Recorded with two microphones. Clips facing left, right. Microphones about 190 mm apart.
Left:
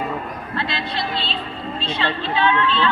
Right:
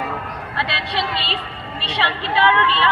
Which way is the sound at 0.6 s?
70° right (ahead or behind).